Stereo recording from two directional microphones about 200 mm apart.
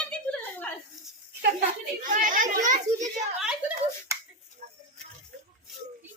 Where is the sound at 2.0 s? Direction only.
40° right (ahead or behind).